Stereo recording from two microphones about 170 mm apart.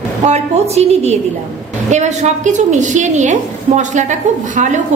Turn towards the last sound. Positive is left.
turn(degrees=-45)  # may be behind; listen again after turning